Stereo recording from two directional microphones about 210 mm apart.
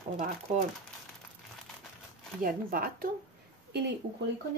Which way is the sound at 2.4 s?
45° right (ahead or behind).